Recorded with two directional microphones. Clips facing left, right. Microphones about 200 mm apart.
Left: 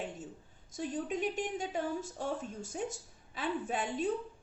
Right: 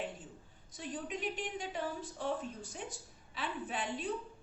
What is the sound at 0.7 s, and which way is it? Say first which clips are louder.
A woman's voice: left 5 dB; 45° left (ahead or behind).